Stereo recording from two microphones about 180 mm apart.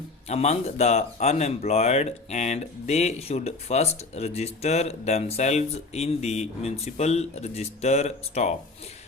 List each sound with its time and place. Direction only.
0.3 s speech: 35° left (ahead or behind)